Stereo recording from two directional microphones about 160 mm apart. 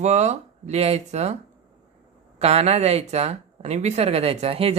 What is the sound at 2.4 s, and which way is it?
Speech, 40° right (ahead or behind).